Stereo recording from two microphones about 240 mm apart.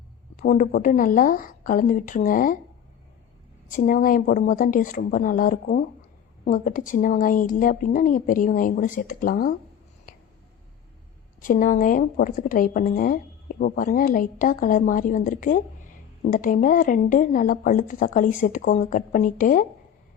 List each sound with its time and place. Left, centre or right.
0.3 s a woman's voice: left
3.7 s a woman's voice: left
11.3 s a woman's voice: left